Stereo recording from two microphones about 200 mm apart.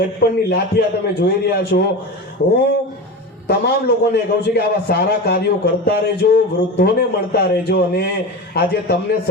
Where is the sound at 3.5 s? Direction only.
55° left (ahead or behind).